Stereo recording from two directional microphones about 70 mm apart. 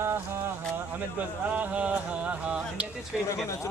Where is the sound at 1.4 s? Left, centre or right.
Right.